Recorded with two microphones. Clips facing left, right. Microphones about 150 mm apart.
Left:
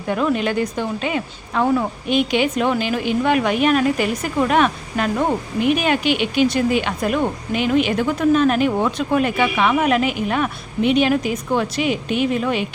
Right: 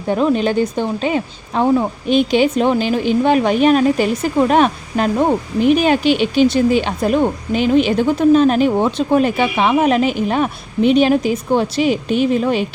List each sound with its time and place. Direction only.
0.1 s a woman's voice: 30° right (ahead or behind)